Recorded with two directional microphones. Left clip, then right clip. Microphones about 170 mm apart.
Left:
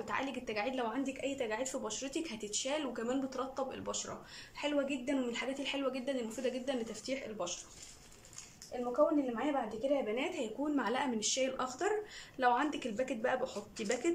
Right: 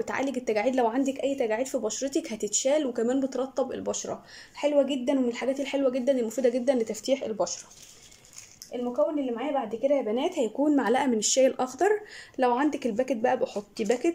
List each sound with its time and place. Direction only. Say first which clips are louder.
0.0 s a woman's voice: right 9 dB; 40° right (ahead or behind)
8.9 s speech: right 4 dB; 25° right (ahead or behind)
10.1 s a woman's voice: right 10 dB; 40° right (ahead or behind)